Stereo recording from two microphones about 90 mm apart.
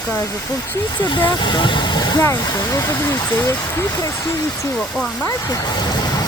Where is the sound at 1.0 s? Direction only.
60° left (ahead or behind).